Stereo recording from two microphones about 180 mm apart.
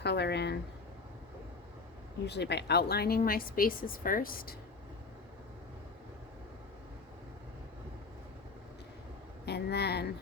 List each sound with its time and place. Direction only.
0.0 s speech: 70° left (ahead or behind)
2.2 s a woman's voice: 70° left (ahead or behind); by 4.5 s 55° left (ahead or behind)
9.5 s a woman's voice: 65° left (ahead or behind)